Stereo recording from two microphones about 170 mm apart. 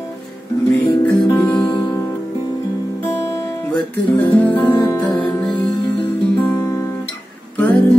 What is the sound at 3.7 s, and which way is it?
Music, 10° left (ahead or behind).